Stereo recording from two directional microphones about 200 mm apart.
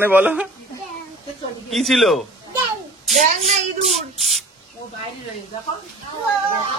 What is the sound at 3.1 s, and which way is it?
Speech, 35° right (ahead or behind).